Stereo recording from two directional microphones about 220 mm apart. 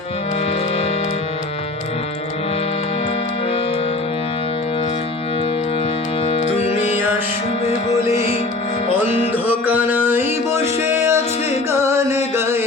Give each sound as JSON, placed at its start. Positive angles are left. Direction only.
{"t": 6.2, "sound": "music", "side_deg": 30}
{"t": 8.9, "sound": "music", "side_deg": -10}